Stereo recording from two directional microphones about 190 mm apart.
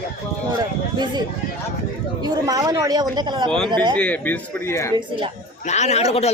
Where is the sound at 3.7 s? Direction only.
25° right (ahead or behind).